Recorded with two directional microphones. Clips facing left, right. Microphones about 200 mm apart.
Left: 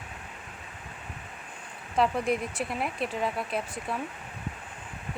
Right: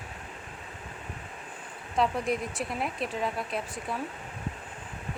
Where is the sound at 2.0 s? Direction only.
Centre (ahead or behind).